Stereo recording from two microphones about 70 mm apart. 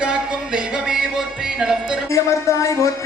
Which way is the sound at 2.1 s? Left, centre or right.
Left.